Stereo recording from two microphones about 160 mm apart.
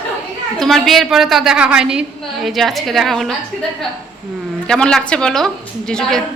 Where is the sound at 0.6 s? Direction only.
Centre (ahead or behind).